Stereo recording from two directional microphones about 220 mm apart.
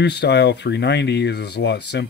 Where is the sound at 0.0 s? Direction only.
50° left (ahead or behind).